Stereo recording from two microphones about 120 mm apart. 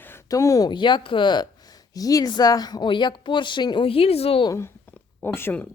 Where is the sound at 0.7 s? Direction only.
40° left (ahead or behind); by 4.4 s 55° left (ahead or behind).